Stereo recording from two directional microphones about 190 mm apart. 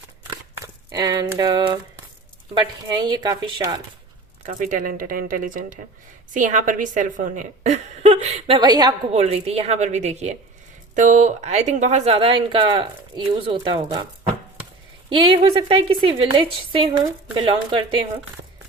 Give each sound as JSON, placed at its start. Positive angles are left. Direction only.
{"t": 0.3, "sound": "a sound", "side_deg": -20}
{"t": 2.6, "sound": "a woman's voice", "side_deg": -20}
{"t": 4.4, "sound": "speech", "side_deg": -45}
{"t": 9.1, "sound": "speech", "side_deg": -35}
{"t": 15.1, "sound": "a woman's voice", "side_deg": -25}